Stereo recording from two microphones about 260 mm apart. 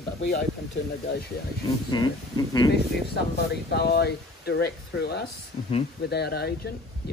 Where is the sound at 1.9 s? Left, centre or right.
Centre.